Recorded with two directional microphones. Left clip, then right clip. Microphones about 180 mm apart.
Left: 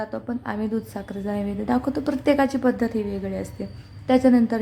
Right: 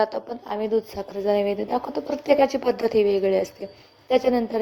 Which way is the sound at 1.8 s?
15° right (ahead or behind).